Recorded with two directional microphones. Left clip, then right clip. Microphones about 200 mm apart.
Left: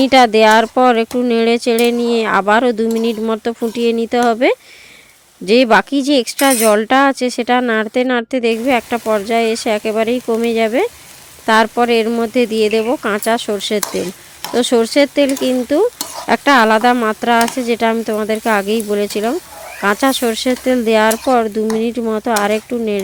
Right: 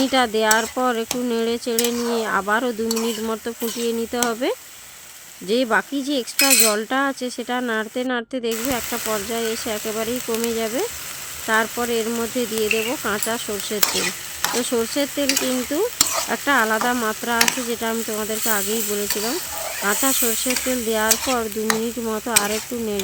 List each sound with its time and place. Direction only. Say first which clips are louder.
0.0 s cutlery: left 10 dB; 40° left (ahead or behind)
19.8 s cutlery: left 8 dB; 40° left (ahead or behind)